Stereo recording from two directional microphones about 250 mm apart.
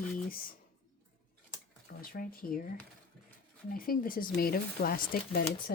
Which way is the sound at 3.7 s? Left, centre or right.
Left.